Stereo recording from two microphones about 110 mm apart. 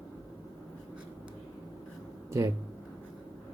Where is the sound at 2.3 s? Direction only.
25° right (ahead or behind).